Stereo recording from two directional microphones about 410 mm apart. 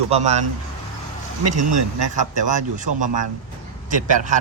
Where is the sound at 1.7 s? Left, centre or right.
Right.